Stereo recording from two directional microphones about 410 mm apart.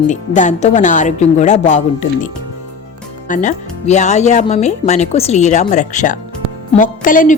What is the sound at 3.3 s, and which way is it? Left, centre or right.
Speech, centre.